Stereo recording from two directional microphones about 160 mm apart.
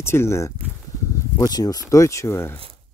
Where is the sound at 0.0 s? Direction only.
15° left (ahead or behind).